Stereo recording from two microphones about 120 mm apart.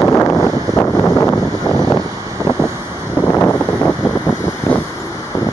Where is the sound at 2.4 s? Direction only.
25° right (ahead or behind).